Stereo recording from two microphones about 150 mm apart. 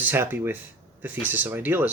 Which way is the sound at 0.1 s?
15° right (ahead or behind).